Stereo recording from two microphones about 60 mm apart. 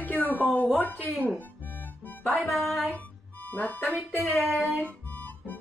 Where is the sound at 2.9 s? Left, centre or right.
Left.